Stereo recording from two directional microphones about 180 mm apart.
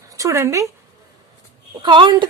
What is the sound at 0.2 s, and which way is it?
Speech, 15° right (ahead or behind).